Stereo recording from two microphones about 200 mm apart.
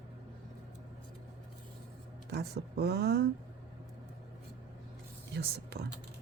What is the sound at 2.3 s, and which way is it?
Speech, 55° right (ahead or behind).